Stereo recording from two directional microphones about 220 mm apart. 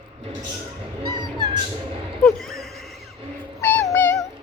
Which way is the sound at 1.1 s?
20° right (ahead or behind).